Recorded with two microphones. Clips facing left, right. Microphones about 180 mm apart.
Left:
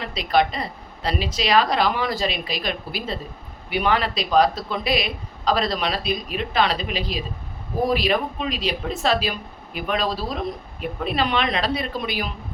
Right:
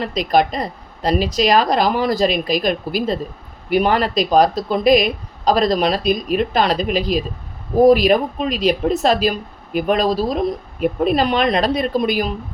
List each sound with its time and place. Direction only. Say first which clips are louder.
0.0 s speech: right 4 dB; 45° right (ahead or behind)